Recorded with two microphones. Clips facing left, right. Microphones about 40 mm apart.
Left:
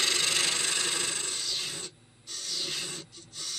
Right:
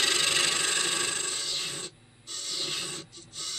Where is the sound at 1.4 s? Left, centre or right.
Centre.